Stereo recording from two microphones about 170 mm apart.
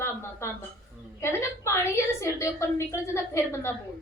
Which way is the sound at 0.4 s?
15° left (ahead or behind).